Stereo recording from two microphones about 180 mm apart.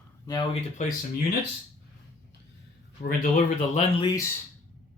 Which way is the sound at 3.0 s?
50° left (ahead or behind).